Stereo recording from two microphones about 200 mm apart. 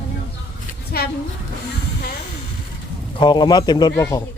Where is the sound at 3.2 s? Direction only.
20° left (ahead or behind).